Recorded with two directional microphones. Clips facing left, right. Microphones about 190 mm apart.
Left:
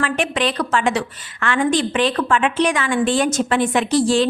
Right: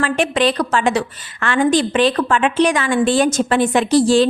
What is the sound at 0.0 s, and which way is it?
A woman's voice, 35° right (ahead or behind).